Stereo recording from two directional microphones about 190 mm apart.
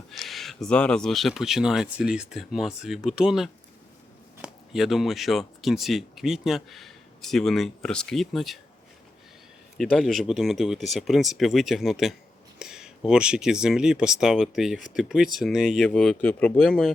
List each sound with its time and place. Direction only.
0.1 s speech: centre (ahead or behind)
9.7 s speech: 5° left (ahead or behind)